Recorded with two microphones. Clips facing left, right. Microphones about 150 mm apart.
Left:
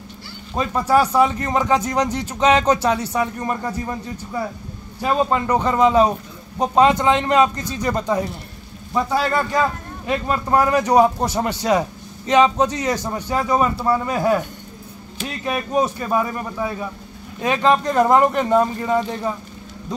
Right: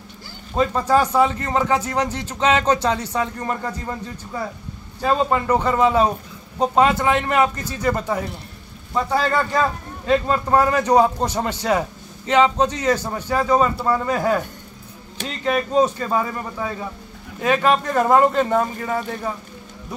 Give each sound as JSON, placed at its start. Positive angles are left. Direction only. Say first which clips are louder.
{"t": 0.6, "sound": "speech", "louder": "even", "side_deg": 10}
{"t": 5.0, "sound": "speech", "louder": "even", "side_deg": 15}